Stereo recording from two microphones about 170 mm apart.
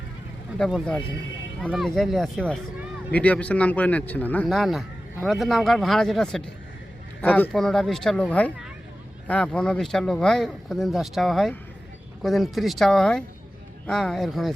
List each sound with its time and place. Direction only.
0.6 s speech: 5° left (ahead or behind)